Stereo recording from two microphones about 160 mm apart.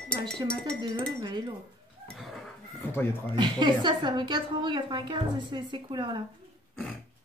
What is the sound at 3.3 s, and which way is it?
A woman's voice, 30° right (ahead or behind).